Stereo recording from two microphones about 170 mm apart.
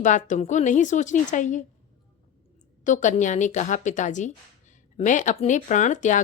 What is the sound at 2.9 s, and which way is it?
Speech, 45° left (ahead or behind).